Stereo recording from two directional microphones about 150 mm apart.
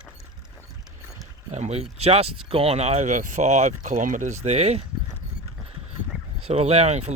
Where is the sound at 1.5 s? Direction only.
45° right (ahead or behind).